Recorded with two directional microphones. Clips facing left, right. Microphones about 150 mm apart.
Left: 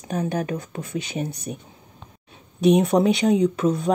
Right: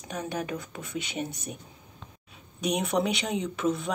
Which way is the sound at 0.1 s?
40° left (ahead or behind).